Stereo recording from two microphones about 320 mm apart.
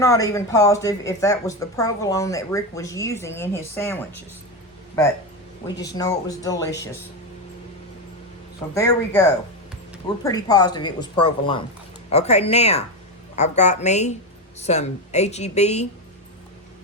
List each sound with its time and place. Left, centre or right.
0.0 s speech: centre
5.6 s speech: centre
8.7 s speech: centre